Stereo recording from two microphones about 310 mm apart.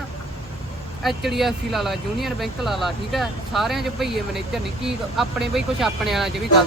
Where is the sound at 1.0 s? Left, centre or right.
Centre.